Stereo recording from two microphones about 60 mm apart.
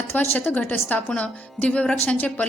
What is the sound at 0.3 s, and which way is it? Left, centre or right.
A woman's voice, left.